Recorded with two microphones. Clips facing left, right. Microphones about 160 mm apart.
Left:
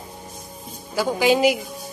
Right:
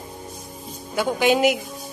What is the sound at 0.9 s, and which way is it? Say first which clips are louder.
Speech: left 1 dB; centre (ahead or behind).